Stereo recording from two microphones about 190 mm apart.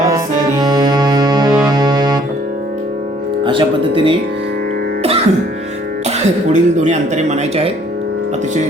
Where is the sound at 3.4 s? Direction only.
25° right (ahead or behind).